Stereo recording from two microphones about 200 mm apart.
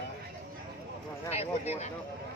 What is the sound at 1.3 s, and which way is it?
Speech, 30° left (ahead or behind).